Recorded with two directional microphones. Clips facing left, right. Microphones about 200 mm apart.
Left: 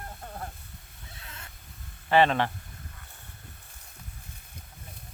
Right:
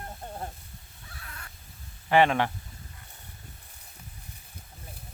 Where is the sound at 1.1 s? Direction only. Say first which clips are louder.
Right 1 dB; 25° left (ahead or behind).